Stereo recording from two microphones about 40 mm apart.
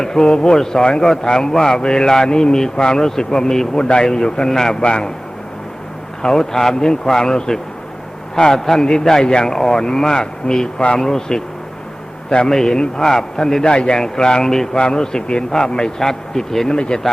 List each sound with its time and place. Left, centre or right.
0.0 s a man's voice: centre
4.8 s a man's voice: left
6.2 s a man's voice: centre
12.5 s a man's voice: centre